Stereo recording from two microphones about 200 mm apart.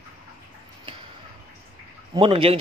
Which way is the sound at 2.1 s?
25° right (ahead or behind).